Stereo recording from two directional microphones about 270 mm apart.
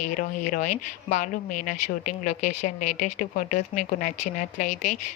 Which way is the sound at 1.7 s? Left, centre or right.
Left.